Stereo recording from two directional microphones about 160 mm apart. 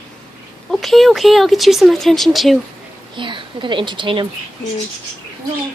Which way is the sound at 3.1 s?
30° right (ahead or behind).